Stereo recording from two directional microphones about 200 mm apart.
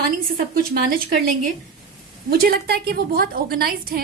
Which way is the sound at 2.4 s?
50° right (ahead or behind).